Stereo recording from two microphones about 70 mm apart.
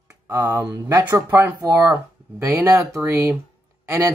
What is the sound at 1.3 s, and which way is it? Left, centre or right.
Speech, right.